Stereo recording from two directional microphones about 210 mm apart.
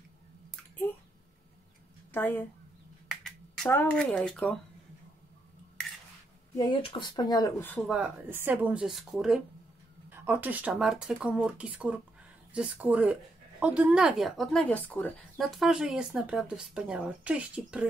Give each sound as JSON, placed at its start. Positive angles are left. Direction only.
{"t": 2.1, "sound": "a woman's voice", "side_deg": 10}
{"t": 3.1, "sound": "a sound", "side_deg": 0}
{"t": 3.6, "sound": "speech", "side_deg": 10}
{"t": 6.5, "sound": "a woman's voice", "side_deg": 20}
{"t": 7.9, "sound": "speech", "side_deg": -5}